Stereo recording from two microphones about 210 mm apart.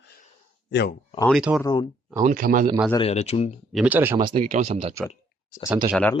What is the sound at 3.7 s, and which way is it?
Speech, 5° right (ahead or behind).